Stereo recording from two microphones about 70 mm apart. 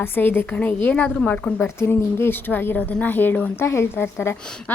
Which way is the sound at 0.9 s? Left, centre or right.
Centre.